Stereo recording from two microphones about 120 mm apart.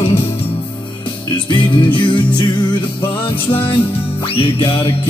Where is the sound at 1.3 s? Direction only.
40° left (ahead or behind).